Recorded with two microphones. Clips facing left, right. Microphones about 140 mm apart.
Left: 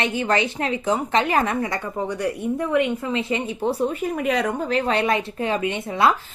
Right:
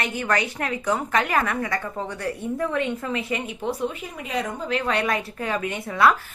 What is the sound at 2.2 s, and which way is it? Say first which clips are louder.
A woman's voice: left 1 dB; 15° left (ahead or behind).